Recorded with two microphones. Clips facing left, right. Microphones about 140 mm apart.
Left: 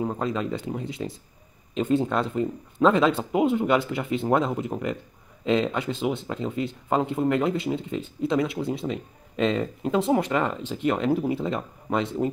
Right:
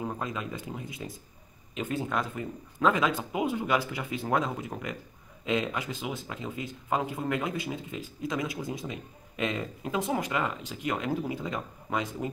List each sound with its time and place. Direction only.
0.0 s speech: 25° left (ahead or behind)